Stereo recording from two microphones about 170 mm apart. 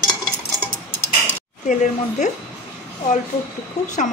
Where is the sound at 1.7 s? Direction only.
45° left (ahead or behind).